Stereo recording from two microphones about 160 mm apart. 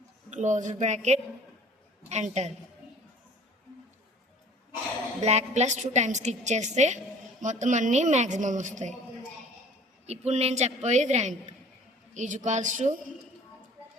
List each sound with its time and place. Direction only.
0.3 s a woman's voice: 50° right (ahead or behind)
5.2 s a woman's voice: 45° right (ahead or behind)
10.1 s a woman's voice: 40° right (ahead or behind)